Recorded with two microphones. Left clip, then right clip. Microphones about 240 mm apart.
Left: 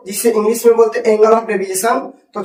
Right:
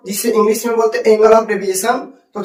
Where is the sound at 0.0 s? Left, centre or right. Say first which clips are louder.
Even; centre.